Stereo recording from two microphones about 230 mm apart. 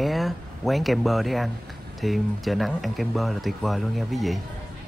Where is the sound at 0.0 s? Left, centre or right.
Centre.